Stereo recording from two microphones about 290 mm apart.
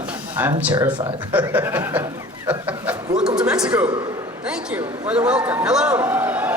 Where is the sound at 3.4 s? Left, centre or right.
Centre.